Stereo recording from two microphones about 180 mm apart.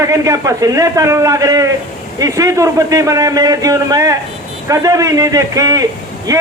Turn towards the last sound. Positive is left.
turn(degrees=-20)  # may be behind; listen again after turning